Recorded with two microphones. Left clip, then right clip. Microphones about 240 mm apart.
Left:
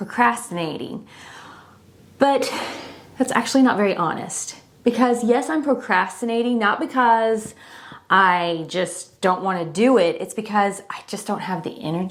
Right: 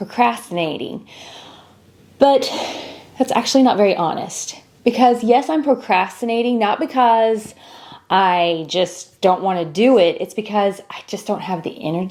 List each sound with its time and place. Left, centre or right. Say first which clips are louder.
0.3 s a woman's voice: right 2 dB; left
2.1 s a woman's voice: right 5 dB; left